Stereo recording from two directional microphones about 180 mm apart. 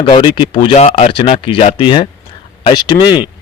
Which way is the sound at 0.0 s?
25° left (ahead or behind).